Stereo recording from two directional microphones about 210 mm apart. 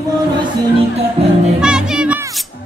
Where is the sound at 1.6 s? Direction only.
5° right (ahead or behind).